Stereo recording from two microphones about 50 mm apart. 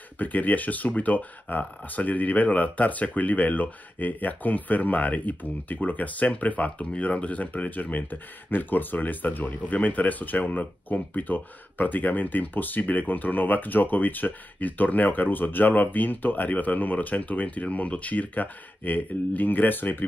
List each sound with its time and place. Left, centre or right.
0.2 s speech: left